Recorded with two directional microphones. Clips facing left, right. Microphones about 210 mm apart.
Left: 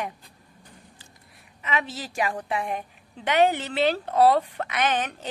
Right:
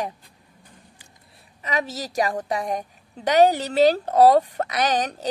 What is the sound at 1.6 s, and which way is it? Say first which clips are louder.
Speech: right 3 dB; 40° right (ahead or behind).